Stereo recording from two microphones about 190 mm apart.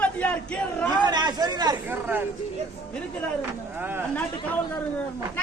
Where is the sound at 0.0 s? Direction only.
5° left (ahead or behind).